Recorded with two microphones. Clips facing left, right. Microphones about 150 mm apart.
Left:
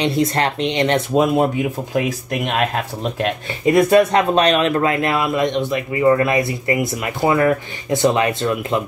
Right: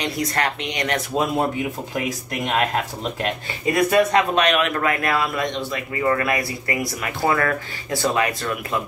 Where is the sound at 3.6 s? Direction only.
25° left (ahead or behind).